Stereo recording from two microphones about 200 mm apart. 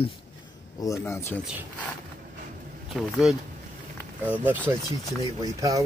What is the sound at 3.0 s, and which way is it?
Speech, centre (ahead or behind).